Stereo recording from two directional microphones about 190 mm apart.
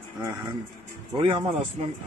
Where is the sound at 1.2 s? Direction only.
30° right (ahead or behind).